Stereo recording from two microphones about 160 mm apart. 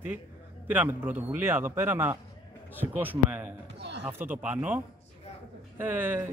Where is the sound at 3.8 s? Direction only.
90° right.